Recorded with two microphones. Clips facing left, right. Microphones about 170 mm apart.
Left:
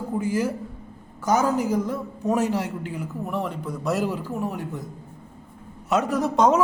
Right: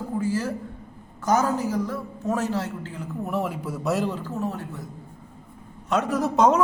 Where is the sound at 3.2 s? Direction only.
5° right (ahead or behind); by 4.6 s 15° left (ahead or behind).